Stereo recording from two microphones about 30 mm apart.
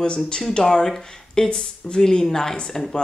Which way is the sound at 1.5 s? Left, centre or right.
Left.